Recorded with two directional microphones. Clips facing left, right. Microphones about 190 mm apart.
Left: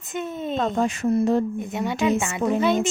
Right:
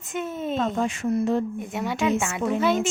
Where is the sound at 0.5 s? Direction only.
40° left (ahead or behind).